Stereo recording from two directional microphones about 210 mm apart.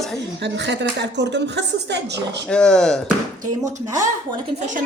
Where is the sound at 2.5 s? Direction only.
5° left (ahead or behind).